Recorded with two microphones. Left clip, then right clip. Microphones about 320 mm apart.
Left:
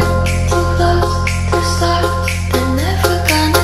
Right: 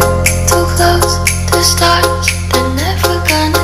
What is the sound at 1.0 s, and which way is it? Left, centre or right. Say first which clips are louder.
Music: right 4 dB; right.